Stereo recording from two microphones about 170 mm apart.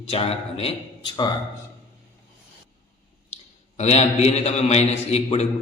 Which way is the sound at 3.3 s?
40° left (ahead or behind).